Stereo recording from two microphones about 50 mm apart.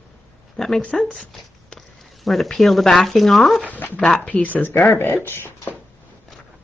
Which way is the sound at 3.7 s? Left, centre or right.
Left.